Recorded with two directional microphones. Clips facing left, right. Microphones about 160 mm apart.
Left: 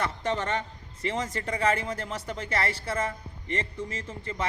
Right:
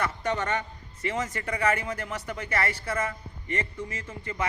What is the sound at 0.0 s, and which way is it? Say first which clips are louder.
Speech: even; 30° left (ahead or behind).